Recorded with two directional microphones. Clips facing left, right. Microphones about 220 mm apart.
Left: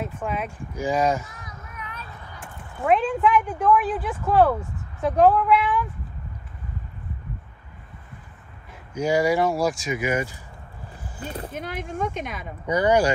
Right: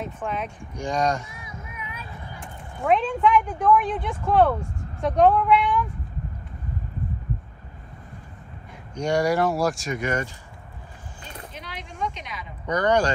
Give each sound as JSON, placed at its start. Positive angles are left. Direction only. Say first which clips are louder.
{"t": 0.0, "sound": "speech", "louder": "left 1 dB", "side_deg": 5}
{"t": 1.4, "sound": "a sound", "louder": "right 1 dB", "side_deg": -10}
{"t": 2.4, "sound": "speech", "louder": "left 1 dB", "side_deg": 5}
{"t": 8.9, "sound": "speech", "louder": "left 1 dB", "side_deg": 5}
{"t": 11.5, "sound": "speech", "louder": "left 9 dB", "side_deg": 50}
{"t": 12.6, "sound": "speech", "louder": "left 2 dB", "side_deg": 10}